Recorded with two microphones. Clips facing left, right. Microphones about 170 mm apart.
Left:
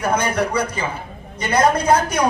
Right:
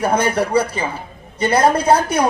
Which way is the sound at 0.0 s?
30° right (ahead or behind).